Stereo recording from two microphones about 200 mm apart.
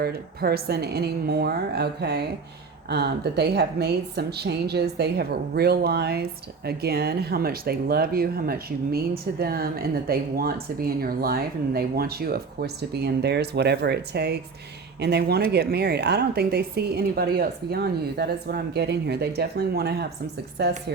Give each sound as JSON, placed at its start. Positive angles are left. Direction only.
{"t": 0.0, "sound": "speech", "side_deg": -50}